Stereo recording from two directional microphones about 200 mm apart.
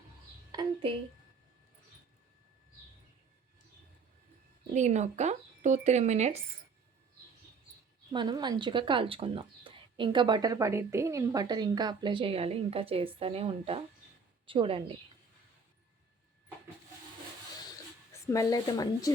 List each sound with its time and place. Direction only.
0.5 s a sound: 25° right (ahead or behind)
4.7 s speech: 35° right (ahead or behind)
8.1 s speech: 20° right (ahead or behind)
18.1 s speech: 15° left (ahead or behind)